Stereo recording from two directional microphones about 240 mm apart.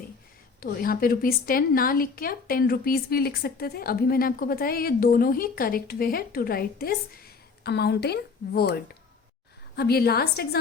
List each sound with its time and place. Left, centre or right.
0.6 s a woman's voice: left